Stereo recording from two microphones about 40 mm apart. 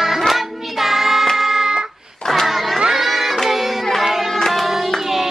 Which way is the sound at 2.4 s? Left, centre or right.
Centre.